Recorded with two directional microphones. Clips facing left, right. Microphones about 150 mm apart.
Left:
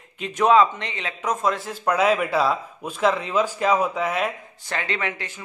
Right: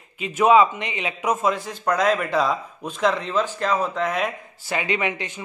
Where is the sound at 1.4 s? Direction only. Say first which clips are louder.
Even; centre (ahead or behind).